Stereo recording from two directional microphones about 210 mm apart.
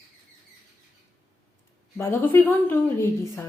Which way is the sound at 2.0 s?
10° left (ahead or behind).